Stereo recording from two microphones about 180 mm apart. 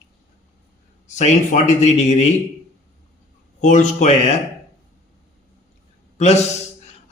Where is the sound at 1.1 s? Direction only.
40° left (ahead or behind).